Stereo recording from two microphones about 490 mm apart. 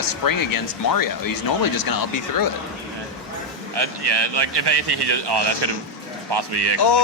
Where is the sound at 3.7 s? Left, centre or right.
Right.